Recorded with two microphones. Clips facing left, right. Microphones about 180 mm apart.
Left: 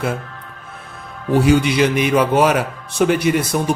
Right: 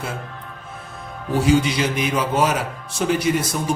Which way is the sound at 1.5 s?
65° left (ahead or behind).